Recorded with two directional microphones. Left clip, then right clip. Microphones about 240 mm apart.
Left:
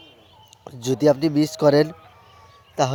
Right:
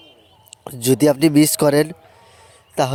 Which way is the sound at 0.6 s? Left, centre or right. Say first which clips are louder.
Right 3 dB; right.